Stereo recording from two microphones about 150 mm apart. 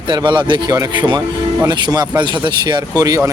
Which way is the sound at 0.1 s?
30° right (ahead or behind).